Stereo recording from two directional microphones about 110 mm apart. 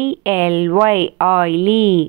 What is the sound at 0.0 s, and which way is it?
A woman's voice, 25° right (ahead or behind).